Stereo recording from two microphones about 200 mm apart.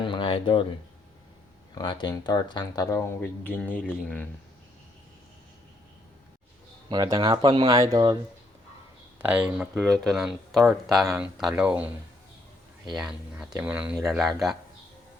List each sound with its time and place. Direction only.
0.0 s a sound: 25° left (ahead or behind)
1.8 s speech: 25° left (ahead or behind)
6.9 s speech: 20° right (ahead or behind)
9.2 s speech: 5° right (ahead or behind)
12.9 s speech: 5° right (ahead or behind)